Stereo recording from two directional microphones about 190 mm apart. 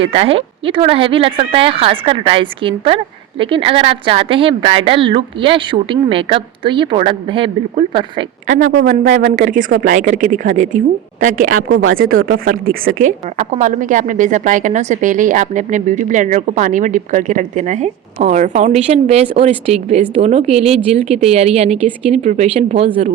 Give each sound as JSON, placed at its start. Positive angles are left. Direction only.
{"t": 0.0, "sound": "speech", "side_deg": -30}
{"t": 8.8, "sound": "a woman's voice", "side_deg": -50}
{"t": 11.7, "sound": "speech", "side_deg": -90}
{"t": 11.9, "sound": "a woman's voice", "side_deg": -50}